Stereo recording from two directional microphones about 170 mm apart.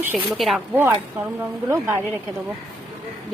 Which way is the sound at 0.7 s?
15° right (ahead or behind).